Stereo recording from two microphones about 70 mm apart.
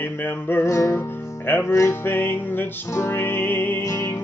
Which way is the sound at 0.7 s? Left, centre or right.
Left.